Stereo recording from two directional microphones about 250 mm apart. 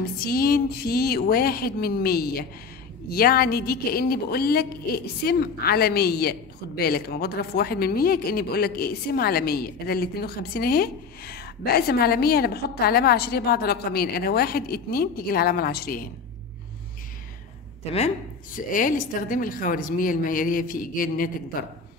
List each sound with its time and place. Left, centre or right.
0.2 s a woman's voice: left
17.9 s a woman's voice: left